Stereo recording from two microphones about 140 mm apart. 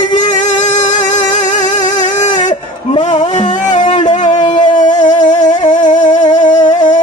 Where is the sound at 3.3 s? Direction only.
60° left (ahead or behind).